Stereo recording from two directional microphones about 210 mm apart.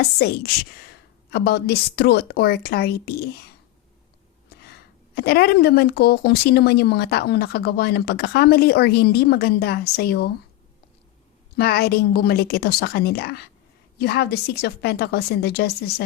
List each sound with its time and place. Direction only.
0.0 s speech: 50° left (ahead or behind)
5.1 s speech: 50° left (ahead or behind)
11.5 s speech: 50° left (ahead or behind)